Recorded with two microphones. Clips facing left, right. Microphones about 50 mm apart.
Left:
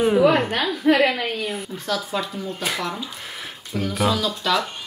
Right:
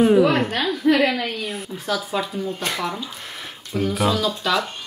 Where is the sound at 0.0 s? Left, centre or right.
Centre.